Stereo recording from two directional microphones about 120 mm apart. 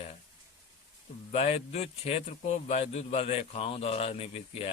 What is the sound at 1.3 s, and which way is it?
Speech, 60° left (ahead or behind).